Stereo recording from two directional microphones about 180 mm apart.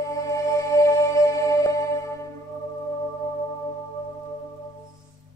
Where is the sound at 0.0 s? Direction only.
20° left (ahead or behind).